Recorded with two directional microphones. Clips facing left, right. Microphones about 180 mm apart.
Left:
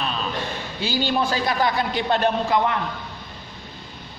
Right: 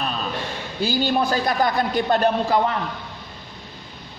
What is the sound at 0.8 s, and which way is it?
A man's voice, 45° right (ahead or behind).